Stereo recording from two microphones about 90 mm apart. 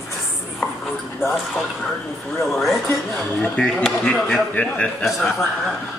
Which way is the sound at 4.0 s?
10° left (ahead or behind).